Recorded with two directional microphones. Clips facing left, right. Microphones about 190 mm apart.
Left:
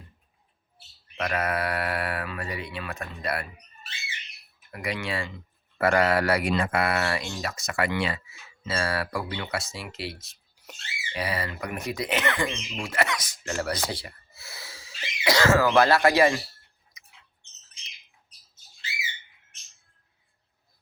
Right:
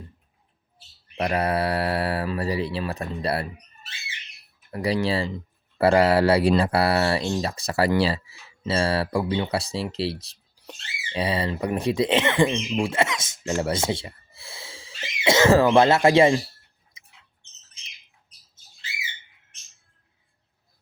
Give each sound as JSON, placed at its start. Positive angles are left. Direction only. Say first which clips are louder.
{"t": 1.1, "sound": "speech", "louder": "right 4 dB", "side_deg": -30}
{"t": 4.7, "sound": "speech", "louder": "right 8 dB", "side_deg": -35}
{"t": 16.9, "sound": "a sound", "louder": "right 1 dB", "side_deg": -25}